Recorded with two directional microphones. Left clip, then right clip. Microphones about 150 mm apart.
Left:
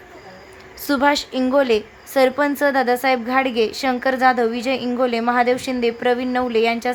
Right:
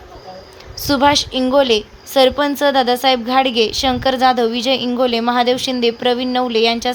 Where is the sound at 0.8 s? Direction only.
15° right (ahead or behind).